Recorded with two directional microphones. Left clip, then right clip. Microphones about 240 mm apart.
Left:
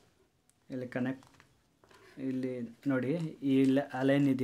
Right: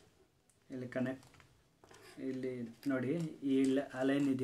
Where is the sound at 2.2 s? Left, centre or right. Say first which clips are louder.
Left 4 dB; left.